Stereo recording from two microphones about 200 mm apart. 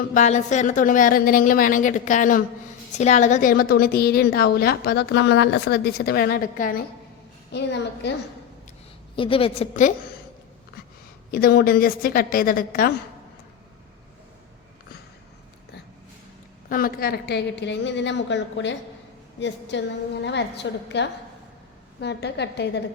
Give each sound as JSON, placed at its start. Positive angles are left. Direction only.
{"t": 0.1, "sound": "a woman's voice", "side_deg": 35}
{"t": 7.5, "sound": "a woman's voice", "side_deg": 60}
{"t": 9.1, "sound": "a woman's voice", "side_deg": 25}
{"t": 11.3, "sound": "a woman's voice", "side_deg": 50}
{"t": 16.6, "sound": "a woman's voice", "side_deg": 45}